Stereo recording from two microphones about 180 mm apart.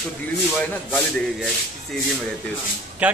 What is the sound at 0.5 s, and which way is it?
Speech, 10° left (ahead or behind).